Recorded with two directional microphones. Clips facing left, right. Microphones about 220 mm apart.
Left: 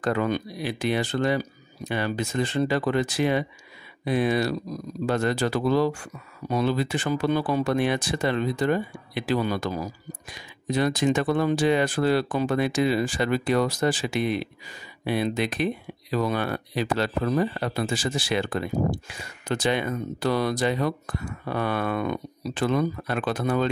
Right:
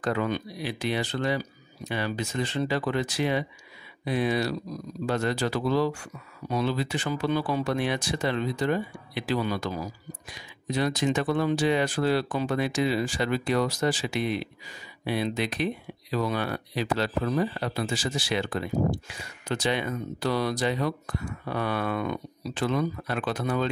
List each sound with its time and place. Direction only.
0.0 s speech: 50° left (ahead or behind)
10.7 s speech: 50° left (ahead or behind)